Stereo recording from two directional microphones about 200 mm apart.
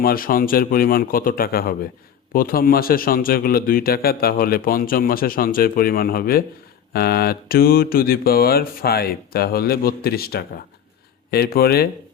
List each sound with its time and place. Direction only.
0.0 s a man's voice: 45° left (ahead or behind)